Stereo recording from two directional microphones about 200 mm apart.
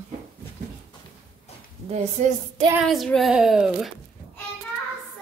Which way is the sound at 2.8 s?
Centre (ahead or behind).